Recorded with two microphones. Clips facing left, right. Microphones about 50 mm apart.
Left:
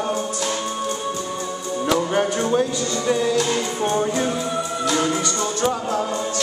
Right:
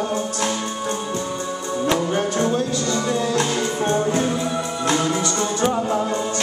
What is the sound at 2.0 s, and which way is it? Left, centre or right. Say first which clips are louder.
Music: even; centre.